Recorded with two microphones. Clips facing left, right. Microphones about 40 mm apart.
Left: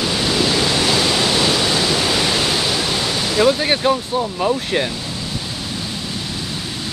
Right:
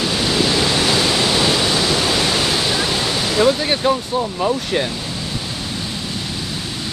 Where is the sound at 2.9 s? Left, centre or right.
Centre.